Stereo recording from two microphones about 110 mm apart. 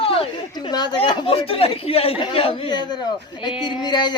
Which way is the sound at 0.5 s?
40° left (ahead or behind).